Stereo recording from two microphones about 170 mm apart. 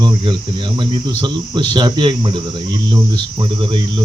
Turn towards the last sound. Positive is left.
turn(degrees=-30)  # may be behind; listen again after turning